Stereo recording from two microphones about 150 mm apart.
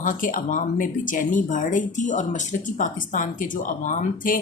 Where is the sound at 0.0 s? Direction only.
60° left (ahead or behind).